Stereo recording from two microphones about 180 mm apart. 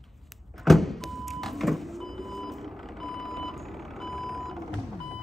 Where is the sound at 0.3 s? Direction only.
Centre (ahead or behind).